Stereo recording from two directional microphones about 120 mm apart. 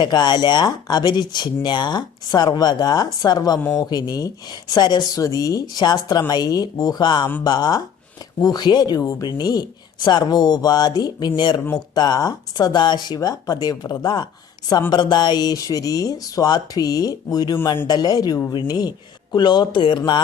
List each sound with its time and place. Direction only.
0.0 s speech: 35° left (ahead or behind)